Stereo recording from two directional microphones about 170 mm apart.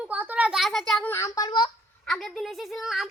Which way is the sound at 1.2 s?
20° left (ahead or behind).